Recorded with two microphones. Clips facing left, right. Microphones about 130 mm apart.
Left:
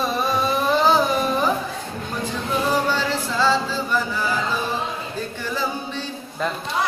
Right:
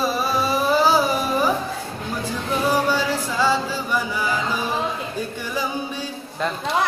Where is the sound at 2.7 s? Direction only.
10° right (ahead or behind).